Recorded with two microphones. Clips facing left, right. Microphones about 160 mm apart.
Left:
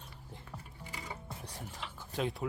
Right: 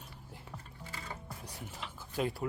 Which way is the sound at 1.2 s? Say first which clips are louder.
Left 1 dB; 10° right (ahead or behind).